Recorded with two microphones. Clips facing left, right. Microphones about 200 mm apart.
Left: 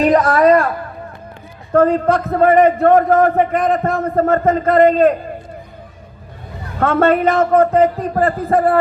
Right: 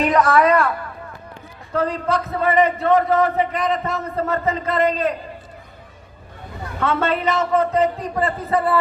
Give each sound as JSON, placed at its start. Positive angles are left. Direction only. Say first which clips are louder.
{"t": 0.0, "sound": "a sound", "louder": "left 4 dB", "side_deg": 35}
{"t": 1.7, "sound": "a man's voice", "louder": "left 8 dB", "side_deg": 50}
{"t": 6.7, "sound": "a man's voice", "louder": "left 7 dB", "side_deg": 50}